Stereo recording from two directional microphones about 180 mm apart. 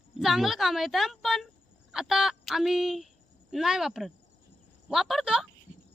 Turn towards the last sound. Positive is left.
turn(degrees=0)  # may be behind; listen again after turning